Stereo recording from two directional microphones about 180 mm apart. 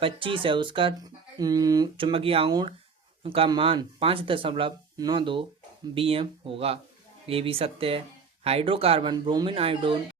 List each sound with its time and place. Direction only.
0.0 s speech: 30° right (ahead or behind)